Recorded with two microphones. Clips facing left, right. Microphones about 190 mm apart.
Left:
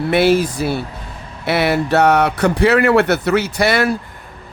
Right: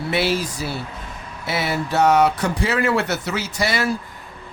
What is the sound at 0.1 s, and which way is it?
Speech, 55° left (ahead or behind).